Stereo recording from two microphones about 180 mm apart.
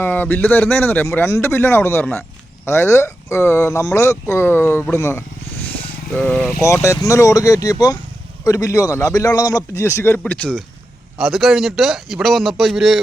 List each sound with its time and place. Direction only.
0.0 s a man's voice: 10° left (ahead or behind)
6.6 s a man's voice: 15° left (ahead or behind); by 13.0 s centre (ahead or behind)